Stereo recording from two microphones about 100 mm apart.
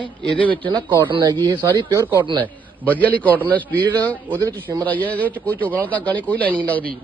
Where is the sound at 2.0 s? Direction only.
25° right (ahead or behind).